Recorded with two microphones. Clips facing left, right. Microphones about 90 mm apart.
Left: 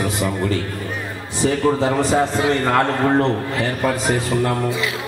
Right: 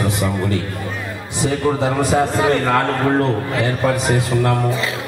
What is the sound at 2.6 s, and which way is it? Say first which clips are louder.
Speech: even; centre (ahead or behind).